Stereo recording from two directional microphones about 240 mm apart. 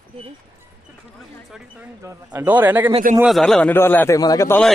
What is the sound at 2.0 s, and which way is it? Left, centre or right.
A man's voice, centre.